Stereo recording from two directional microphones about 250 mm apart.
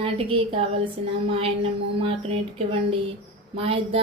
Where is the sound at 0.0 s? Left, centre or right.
Right.